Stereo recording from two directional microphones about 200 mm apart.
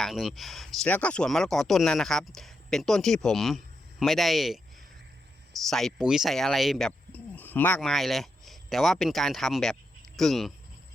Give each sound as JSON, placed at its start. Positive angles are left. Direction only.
{"t": 0.0, "sound": "speech", "side_deg": 0}
{"t": 5.6, "sound": "speech", "side_deg": 0}